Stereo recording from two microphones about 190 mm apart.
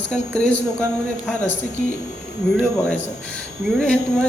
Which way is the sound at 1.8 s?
45° right (ahead or behind).